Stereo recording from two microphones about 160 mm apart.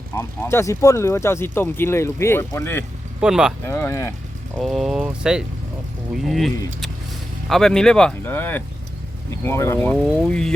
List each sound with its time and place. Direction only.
0.2 s speech: 15° left (ahead or behind)
3.2 s speech: 5° right (ahead or behind)
3.7 s speech: 15° left (ahead or behind)
4.6 s speech: centre (ahead or behind)